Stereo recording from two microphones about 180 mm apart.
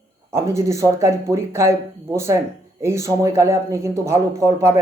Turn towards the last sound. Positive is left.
turn(degrees=-15)  # may be behind; listen again after turning